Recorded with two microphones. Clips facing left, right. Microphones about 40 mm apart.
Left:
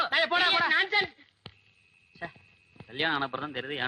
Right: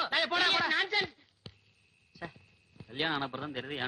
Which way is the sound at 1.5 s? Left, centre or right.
Left.